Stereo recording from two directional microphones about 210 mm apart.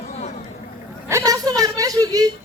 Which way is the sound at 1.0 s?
15° right (ahead or behind).